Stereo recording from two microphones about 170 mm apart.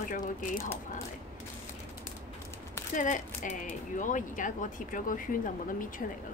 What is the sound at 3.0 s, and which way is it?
Speech, 50° left (ahead or behind).